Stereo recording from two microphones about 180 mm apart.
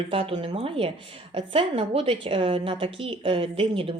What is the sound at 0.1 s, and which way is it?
A woman's voice, 30° right (ahead or behind).